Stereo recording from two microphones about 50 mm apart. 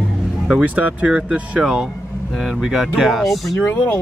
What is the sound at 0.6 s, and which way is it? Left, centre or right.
Speech, right.